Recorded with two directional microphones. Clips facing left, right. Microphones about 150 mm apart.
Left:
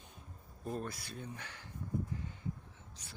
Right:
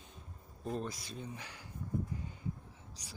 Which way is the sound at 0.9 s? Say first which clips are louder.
Right 1 dB; 60° left (ahead or behind).